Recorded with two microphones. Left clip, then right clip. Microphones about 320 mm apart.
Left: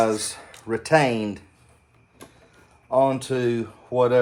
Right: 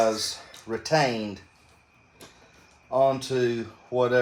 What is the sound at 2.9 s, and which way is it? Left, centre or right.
A man's voice, left.